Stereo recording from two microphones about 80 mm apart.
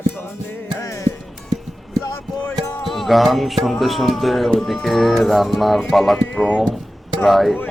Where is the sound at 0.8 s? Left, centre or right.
Left.